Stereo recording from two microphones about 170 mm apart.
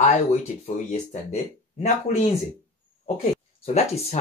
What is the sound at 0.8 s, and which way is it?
Speech, 40° left (ahead or behind).